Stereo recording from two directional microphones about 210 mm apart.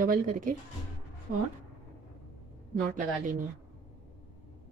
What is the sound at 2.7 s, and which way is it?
Speech, 40° right (ahead or behind).